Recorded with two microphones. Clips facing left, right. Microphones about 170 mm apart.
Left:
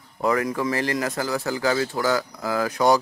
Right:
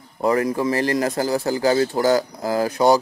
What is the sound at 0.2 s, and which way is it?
Speech, 30° right (ahead or behind).